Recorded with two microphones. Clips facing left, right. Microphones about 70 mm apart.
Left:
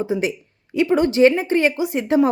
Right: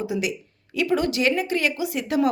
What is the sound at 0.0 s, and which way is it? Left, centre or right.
A woman's voice, left.